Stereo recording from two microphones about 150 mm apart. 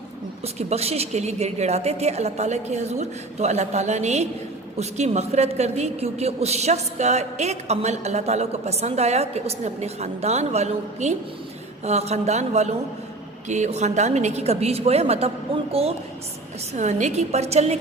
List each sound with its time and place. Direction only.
0.4 s a woman's voice: 45° right (ahead or behind)